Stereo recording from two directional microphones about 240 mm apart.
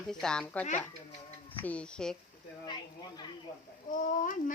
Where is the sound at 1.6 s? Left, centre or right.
Centre.